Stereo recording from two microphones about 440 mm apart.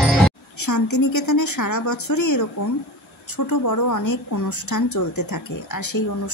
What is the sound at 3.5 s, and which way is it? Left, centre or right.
Speech, left.